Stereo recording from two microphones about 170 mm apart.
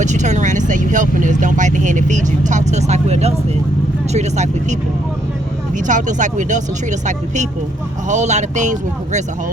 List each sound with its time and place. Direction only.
0.0 s speech: 45° right (ahead or behind)
5.8 s speech: 45° right (ahead or behind)
8.1 s speech: 45° right (ahead or behind)